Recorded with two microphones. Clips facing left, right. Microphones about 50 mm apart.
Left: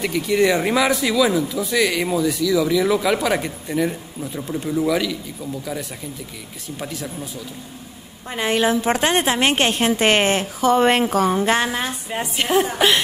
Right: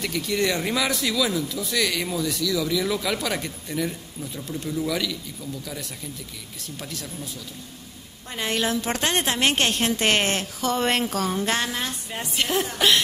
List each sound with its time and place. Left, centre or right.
0.0 s speech: centre
8.3 s speech: centre